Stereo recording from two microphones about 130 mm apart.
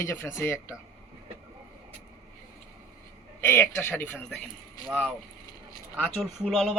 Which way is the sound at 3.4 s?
15° left (ahead or behind).